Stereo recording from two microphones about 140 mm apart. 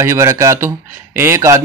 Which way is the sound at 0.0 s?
20° right (ahead or behind).